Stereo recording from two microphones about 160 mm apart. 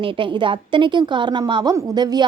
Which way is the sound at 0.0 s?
35° right (ahead or behind).